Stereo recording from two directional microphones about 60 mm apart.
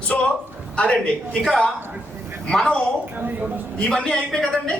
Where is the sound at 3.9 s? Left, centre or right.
Centre.